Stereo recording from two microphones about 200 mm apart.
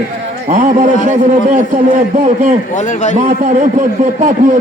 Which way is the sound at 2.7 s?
35° left (ahead or behind).